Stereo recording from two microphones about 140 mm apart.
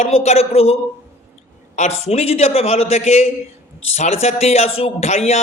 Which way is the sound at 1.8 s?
50° left (ahead or behind).